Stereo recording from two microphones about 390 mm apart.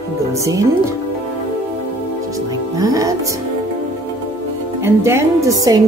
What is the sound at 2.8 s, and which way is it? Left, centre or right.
Music, centre.